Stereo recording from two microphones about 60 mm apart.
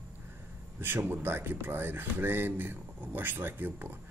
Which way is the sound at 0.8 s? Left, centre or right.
Right.